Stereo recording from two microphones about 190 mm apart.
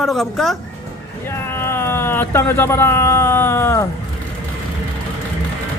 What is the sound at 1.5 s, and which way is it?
Speech, 15° left (ahead or behind).